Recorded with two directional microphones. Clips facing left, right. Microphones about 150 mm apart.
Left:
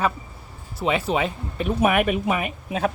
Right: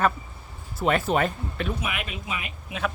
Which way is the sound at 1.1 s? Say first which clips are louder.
Even; centre (ahead or behind).